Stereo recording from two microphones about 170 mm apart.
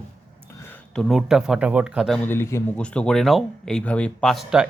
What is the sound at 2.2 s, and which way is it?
Speech, 15° left (ahead or behind).